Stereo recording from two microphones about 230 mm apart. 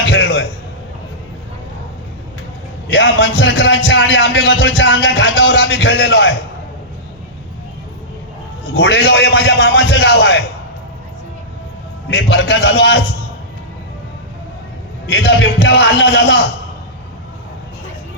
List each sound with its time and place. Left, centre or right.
0.1 s a sound: left
2.9 s music: left
8.7 s music: left
12.1 s music: left
15.0 s music: left